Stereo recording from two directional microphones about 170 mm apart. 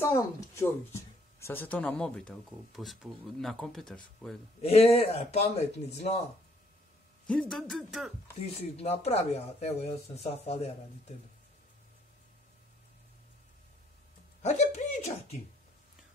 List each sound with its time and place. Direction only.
0.1 s speech: 15° left (ahead or behind)
4.6 s a man's voice: 35° left (ahead or behind)
7.2 s speech: 5° left (ahead or behind)
8.4 s a man's voice: 35° left (ahead or behind)
14.4 s speech: 45° left (ahead or behind)